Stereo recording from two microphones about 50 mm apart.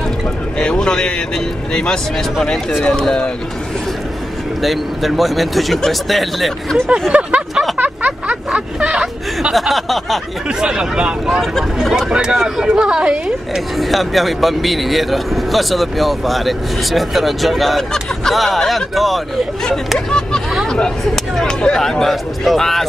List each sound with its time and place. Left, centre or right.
0.6 s a man's voice: centre
4.6 s speech: centre
7.1 s a sound: right
7.7 s vehicle: right
8.7 s speech: centre
9.5 s speech: centre
10.6 s speech: centre
13.7 s speech: centre